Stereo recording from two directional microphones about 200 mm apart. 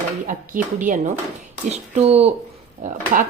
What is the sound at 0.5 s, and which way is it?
Speech, 45° right (ahead or behind).